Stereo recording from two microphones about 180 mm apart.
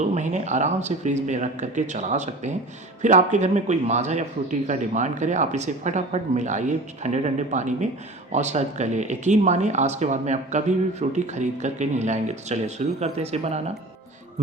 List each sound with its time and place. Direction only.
0.0 s speech: 40° right (ahead or behind)